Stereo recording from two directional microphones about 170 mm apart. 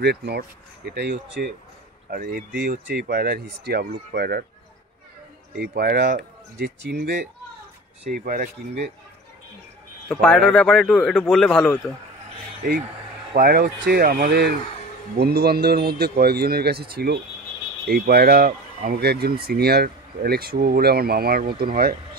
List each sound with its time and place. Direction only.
0.0 s speech: 75° right (ahead or behind)
2.0 s speech: 60° right (ahead or behind)
5.6 s speech: 65° right (ahead or behind)
8.1 s speech: 55° right (ahead or behind)
10.0 s a man's voice: 5° left (ahead or behind)
13.3 s speech: 60° right (ahead or behind)